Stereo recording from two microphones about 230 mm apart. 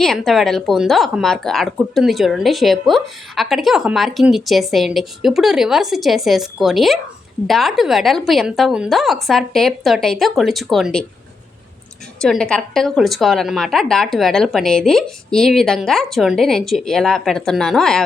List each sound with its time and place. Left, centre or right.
0.0 s speech: centre
12.2 s speech: centre